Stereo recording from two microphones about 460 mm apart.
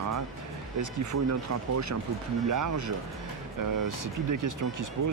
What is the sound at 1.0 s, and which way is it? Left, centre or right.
Speech, right.